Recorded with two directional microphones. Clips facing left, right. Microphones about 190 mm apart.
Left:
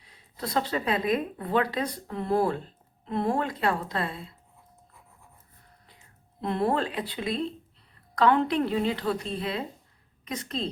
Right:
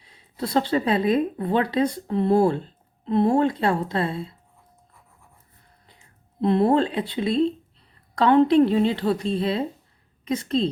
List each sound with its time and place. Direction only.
0.0 s a woman's voice: 25° right (ahead or behind)
6.4 s a woman's voice: 25° right (ahead or behind)